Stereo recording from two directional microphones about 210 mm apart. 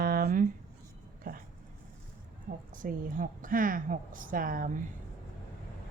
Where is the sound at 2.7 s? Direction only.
40° right (ahead or behind).